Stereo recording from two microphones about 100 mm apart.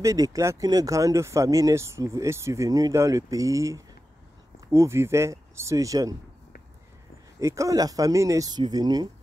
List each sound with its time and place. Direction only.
0.0 s speech: 35° right (ahead or behind)
7.3 s speech: 35° right (ahead or behind)